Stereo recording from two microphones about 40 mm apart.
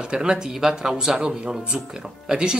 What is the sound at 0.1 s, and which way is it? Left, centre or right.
Speech, centre.